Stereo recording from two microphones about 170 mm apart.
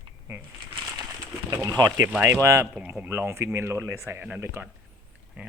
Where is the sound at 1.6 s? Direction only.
20° right (ahead or behind).